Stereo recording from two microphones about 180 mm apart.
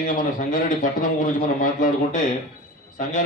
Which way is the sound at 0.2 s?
50° left (ahead or behind).